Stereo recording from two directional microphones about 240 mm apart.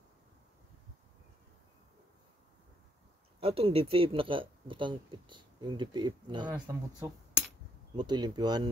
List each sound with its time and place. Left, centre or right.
3.3 s speech: right